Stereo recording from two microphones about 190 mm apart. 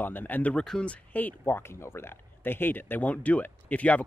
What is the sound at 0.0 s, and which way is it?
Speech, 10° left (ahead or behind).